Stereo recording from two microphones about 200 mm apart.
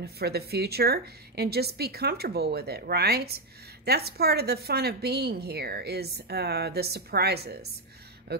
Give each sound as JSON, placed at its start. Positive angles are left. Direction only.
{"t": 0.0, "sound": "a woman's voice", "side_deg": -55}